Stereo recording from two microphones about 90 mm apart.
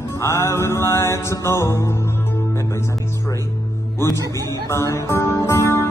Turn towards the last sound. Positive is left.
turn(degrees=25)  # may be behind; listen again after turning